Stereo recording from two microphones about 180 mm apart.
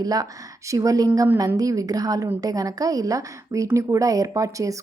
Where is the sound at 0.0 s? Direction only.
20° right (ahead or behind).